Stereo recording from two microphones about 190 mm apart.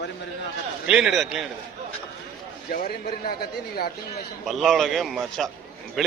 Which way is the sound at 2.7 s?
50° left (ahead or behind).